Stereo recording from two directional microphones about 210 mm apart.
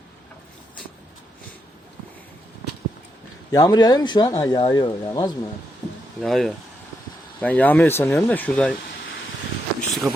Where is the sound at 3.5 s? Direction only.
20° left (ahead or behind).